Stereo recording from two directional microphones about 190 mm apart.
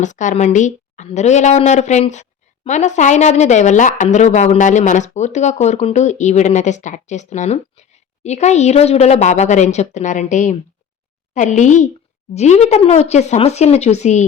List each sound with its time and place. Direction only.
0.0 s speech: 40° left (ahead or behind)